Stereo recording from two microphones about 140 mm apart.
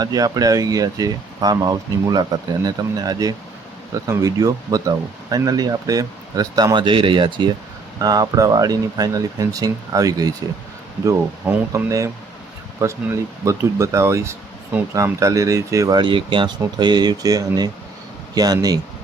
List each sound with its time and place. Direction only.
0.0 s speech: 25° right (ahead or behind)
11.4 s speech: 25° right (ahead or behind)